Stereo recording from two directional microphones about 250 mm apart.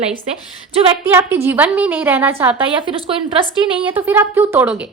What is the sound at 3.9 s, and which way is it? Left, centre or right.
Speech, centre.